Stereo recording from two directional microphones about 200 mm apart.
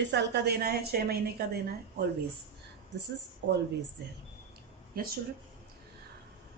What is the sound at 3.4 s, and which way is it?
Speech, 65° right (ahead or behind).